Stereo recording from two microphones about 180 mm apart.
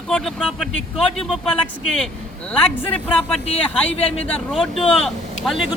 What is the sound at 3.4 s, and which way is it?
Speech, 35° left (ahead or behind).